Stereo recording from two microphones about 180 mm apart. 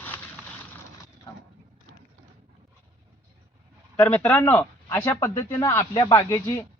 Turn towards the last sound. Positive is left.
turn(degrees=20)  # may be behind; listen again after turning